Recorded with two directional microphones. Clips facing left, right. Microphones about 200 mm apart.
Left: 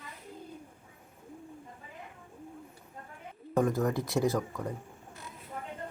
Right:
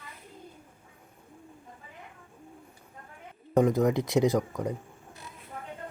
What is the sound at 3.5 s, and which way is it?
Speech, 20° right (ahead or behind).